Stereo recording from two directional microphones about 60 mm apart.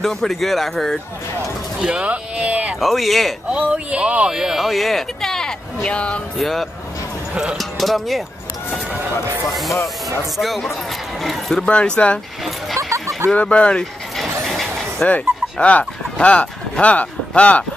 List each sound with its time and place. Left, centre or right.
0.0 s speech: centre
1.8 s speech: right
2.8 s speech: centre
3.4 s speech: centre
4.3 s speech: centre
6.3 s speech: centre
9.5 s speech: centre
11.5 s speech: centre
12.7 s a sound: right
13.3 s speech: centre
14.4 s a sound: centre
15.6 s speech: centre